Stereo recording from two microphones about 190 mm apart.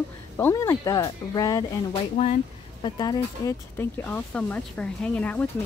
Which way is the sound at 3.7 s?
10° left (ahead or behind).